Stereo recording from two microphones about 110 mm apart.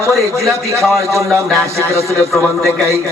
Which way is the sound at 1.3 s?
Centre (ahead or behind).